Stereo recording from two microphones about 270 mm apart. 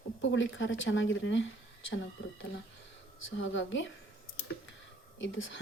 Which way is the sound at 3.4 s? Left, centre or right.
Left.